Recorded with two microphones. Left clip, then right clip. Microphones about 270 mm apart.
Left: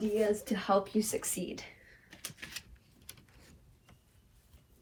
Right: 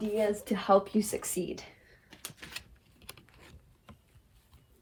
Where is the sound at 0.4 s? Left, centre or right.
Right.